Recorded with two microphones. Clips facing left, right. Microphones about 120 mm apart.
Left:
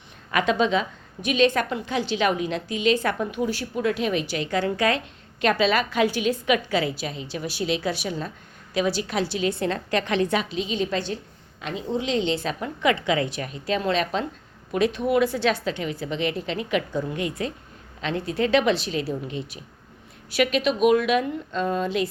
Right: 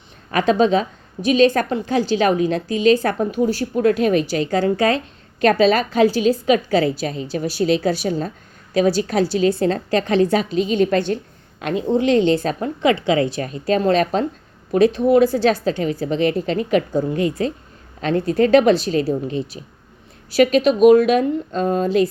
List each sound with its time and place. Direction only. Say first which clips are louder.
0.3 s a woman's voice: right 6 dB; 35° right (ahead or behind)